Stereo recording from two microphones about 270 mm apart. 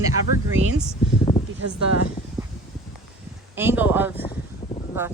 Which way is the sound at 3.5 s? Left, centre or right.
Centre.